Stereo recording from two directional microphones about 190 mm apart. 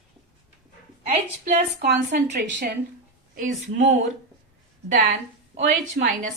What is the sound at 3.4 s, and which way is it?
Speech, 40° right (ahead or behind).